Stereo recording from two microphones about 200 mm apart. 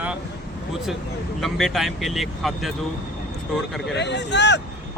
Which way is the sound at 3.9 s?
60° left (ahead or behind).